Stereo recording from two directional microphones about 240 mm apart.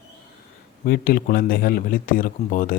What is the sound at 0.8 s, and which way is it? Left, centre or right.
Speech, left.